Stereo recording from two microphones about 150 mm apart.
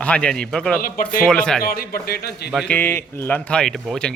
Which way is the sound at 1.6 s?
80° left.